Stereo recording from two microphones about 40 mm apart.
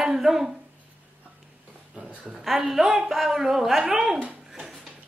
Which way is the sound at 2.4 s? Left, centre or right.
Centre.